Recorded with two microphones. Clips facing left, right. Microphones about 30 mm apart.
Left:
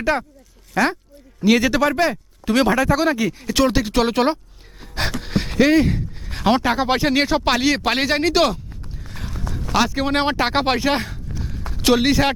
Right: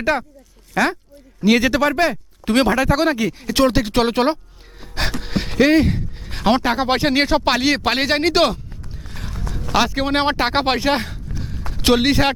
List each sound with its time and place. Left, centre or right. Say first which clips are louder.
0.8 s speech: even; centre
2.4 s speech: right 1 dB; right
9.0 s a sound: even; centre
9.6 s speech: right 1 dB; centre